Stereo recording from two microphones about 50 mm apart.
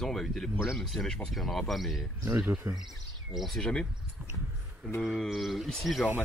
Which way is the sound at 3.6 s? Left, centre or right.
Centre.